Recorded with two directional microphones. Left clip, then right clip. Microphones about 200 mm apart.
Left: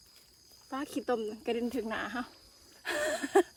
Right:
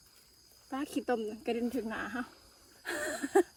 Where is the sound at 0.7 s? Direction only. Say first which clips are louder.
Left 1 dB; centre (ahead or behind).